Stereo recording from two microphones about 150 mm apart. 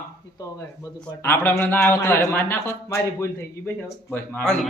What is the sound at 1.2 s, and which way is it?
A man's voice, 15° left (ahead or behind).